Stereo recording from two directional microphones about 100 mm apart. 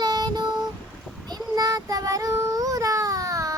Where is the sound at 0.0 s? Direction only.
45° right (ahead or behind).